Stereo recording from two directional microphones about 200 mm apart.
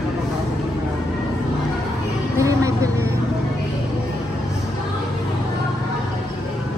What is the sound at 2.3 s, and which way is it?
Vehicle, 15° right (ahead or behind).